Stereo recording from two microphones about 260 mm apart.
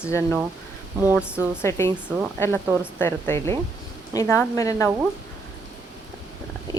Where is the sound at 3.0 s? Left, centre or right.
Centre.